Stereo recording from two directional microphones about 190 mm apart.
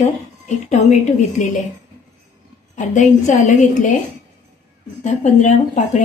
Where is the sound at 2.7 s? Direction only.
40° left (ahead or behind).